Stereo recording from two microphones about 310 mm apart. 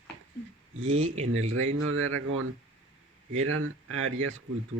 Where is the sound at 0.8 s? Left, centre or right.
Right.